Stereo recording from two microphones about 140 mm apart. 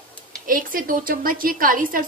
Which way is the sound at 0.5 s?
85° right.